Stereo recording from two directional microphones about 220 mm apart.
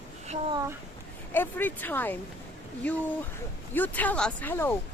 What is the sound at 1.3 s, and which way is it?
Speech, 10° left (ahead or behind).